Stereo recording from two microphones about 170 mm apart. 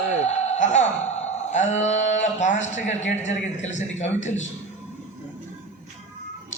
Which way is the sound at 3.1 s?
45° left (ahead or behind).